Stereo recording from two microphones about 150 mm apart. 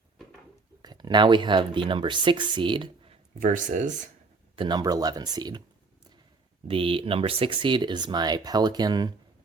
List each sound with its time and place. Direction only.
0.8 s speech: 25° right (ahead or behind)
3.4 s speech: 60° right (ahead or behind)
4.5 s speech: 30° right (ahead or behind)
6.7 s speech: 35° right (ahead or behind)